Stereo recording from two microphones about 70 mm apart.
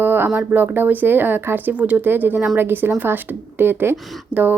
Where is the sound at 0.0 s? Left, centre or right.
Right.